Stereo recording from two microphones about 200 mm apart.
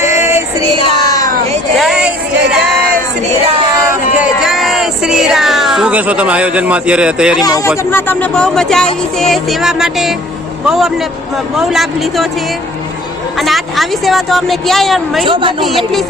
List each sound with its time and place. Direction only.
0.0 s music: 10° right (ahead or behind)
0.8 s a sound: 25° left (ahead or behind)
1.8 s speech: 5° right (ahead or behind)
4.2 s speech: centre (ahead or behind)
7.4 s speech: 15° left (ahead or behind); by 12.3 s centre (ahead or behind)
13.4 s speech: centre (ahead or behind)
15.3 s a woman's voice: 25° right (ahead or behind)